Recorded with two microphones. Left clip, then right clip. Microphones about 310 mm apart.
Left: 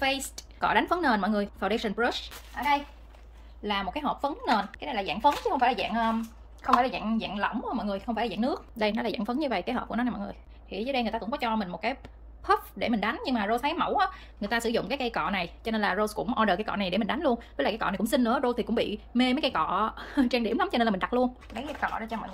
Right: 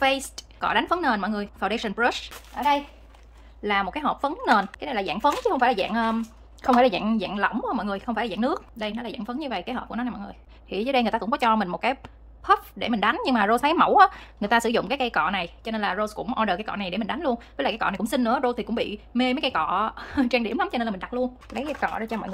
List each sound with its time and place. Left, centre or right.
0.0 s a woman's voice: centre
2.5 s a child's voice: right
3.6 s a woman's voice: centre
8.7 s a woman's voice: centre
10.7 s a woman's voice: centre
21.5 s a woman's voice: centre